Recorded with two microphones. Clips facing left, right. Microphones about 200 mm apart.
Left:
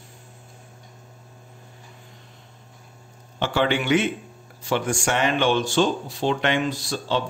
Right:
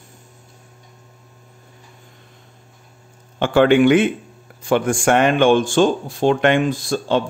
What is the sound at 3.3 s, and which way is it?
Speech, 50° right (ahead or behind).